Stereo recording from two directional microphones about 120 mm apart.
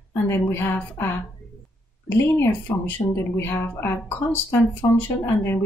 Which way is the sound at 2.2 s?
20° left (ahead or behind).